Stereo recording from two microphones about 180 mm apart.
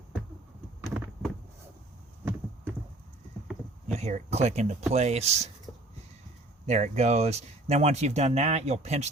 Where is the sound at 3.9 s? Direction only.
35° right (ahead or behind).